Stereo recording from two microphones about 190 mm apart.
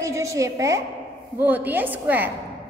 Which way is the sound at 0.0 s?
15° right (ahead or behind).